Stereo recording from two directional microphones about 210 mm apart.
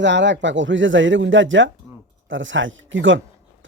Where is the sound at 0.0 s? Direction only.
60° right (ahead or behind).